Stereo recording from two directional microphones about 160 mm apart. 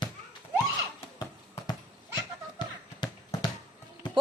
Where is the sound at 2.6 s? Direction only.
25° left (ahead or behind).